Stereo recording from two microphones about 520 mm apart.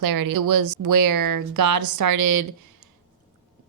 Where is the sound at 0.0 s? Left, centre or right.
Right.